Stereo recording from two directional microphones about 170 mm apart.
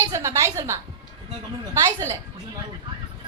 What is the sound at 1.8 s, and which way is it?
Speech, 15° right (ahead or behind).